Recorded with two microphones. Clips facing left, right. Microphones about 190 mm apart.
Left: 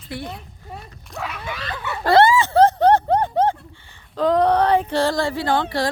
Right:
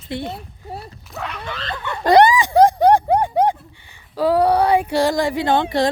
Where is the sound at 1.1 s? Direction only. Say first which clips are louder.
Even; centre (ahead or behind).